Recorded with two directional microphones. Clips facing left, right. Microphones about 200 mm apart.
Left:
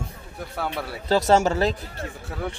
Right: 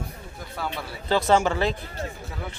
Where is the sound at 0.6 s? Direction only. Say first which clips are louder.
Left 2 dB; 60° left (ahead or behind).